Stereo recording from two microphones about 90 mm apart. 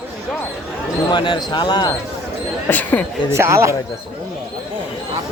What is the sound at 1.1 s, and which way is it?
Speech, 55° left (ahead or behind).